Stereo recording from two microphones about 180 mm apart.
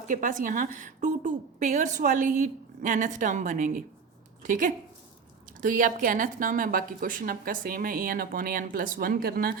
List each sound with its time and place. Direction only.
0.1 s a woman's voice: 45° right (ahead or behind)